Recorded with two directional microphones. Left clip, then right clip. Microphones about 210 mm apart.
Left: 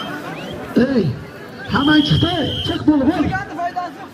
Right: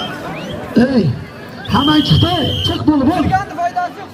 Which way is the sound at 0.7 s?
55° right (ahead or behind).